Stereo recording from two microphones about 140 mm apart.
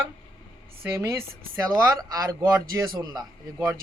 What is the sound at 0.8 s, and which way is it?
A woman's voice, 20° right (ahead or behind).